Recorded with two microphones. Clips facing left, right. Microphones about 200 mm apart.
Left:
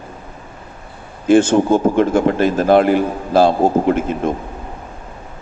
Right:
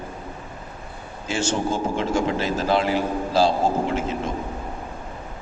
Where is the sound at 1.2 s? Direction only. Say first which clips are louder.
Left 13 dB; 55° left (ahead or behind).